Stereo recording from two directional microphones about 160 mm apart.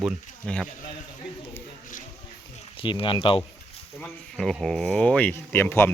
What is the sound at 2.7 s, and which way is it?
Speech, 35° left (ahead or behind).